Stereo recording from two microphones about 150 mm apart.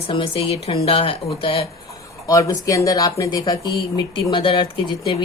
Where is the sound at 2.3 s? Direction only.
20° left (ahead or behind).